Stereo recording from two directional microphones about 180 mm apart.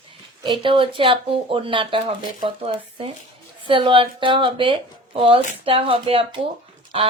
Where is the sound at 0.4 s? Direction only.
25° right (ahead or behind).